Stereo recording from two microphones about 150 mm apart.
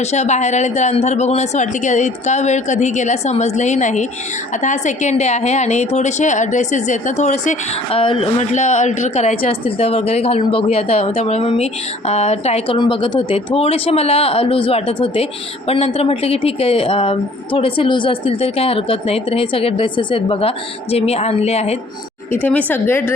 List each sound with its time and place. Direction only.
0.0 s speech: 50° left (ahead or behind)
7.9 s a woman's voice: 35° left (ahead or behind)
22.3 s a woman's voice: 10° left (ahead or behind)